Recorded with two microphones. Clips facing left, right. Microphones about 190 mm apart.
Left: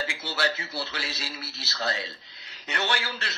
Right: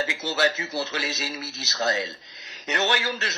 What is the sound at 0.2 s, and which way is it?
Speech, 45° right (ahead or behind).